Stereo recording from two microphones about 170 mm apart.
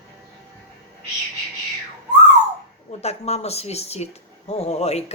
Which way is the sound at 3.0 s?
40° left (ahead or behind).